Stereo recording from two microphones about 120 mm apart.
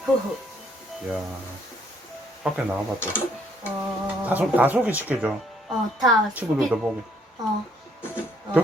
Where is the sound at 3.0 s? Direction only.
20° left (ahead or behind).